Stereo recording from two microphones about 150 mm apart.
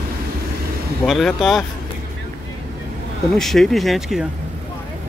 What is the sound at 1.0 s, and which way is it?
Speech, 5° left (ahead or behind).